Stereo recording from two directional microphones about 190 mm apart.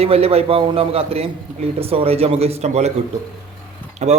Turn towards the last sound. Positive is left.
turn(degrees=-40)  # may be behind; listen again after turning